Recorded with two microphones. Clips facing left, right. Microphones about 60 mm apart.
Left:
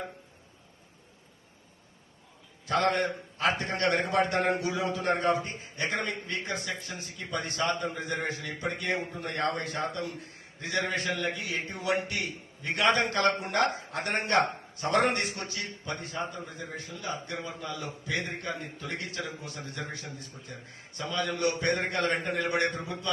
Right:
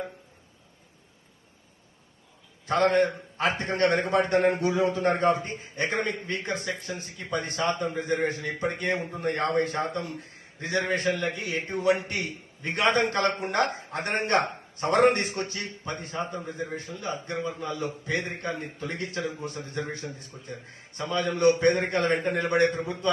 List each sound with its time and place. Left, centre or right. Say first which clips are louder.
2.6 s a man's voice: right 4 dB; right